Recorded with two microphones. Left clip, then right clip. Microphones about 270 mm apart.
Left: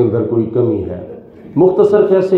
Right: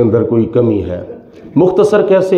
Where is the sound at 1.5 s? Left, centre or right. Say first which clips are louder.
Even; right.